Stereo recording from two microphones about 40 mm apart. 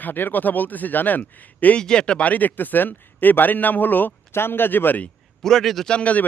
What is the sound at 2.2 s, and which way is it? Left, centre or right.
Speech, left.